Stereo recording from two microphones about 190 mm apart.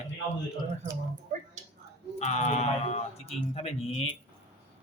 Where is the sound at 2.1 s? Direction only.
35° left (ahead or behind).